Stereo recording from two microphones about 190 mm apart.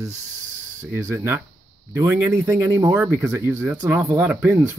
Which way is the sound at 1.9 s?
15° right (ahead or behind).